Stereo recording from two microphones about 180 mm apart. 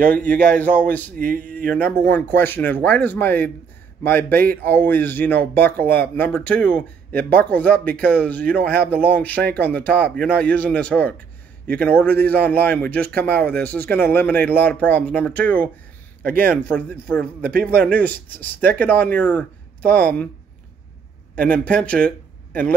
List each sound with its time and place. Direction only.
0.1 s speech: 10° left (ahead or behind)
1.1 s speech: 50° right (ahead or behind)
1.7 s speech: 10° left (ahead or behind)
16.2 s speech: 55° right (ahead or behind)
16.4 s speech: 10° left (ahead or behind)
21.6 s speech: 5° left (ahead or behind)